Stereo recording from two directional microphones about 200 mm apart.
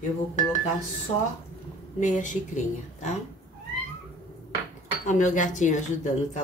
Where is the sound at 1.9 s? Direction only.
40° left (ahead or behind).